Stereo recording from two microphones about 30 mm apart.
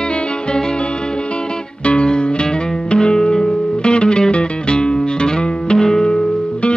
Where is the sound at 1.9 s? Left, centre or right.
Left.